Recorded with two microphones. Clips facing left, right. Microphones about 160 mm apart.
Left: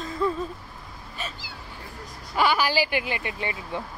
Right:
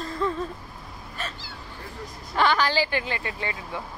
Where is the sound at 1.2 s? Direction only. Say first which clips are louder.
Even; 10° left (ahead or behind).